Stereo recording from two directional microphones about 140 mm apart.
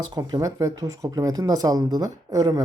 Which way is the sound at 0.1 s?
25° right (ahead or behind).